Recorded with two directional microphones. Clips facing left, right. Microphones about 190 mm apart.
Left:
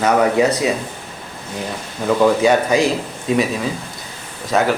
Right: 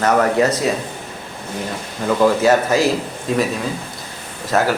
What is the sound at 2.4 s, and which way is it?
Speech, 5° right (ahead or behind).